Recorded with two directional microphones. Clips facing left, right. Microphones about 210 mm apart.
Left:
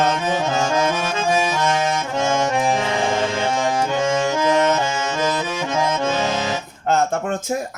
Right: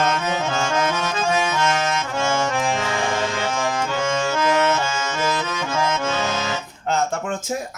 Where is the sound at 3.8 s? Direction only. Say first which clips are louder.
Left 3 dB; 20° left (ahead or behind).